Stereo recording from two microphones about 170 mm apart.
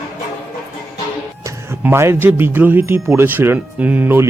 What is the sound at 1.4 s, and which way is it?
Speech, 15° right (ahead or behind).